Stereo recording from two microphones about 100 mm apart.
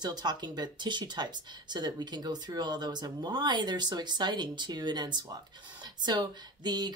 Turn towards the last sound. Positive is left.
turn(degrees=-45)  # may be behind; listen again after turning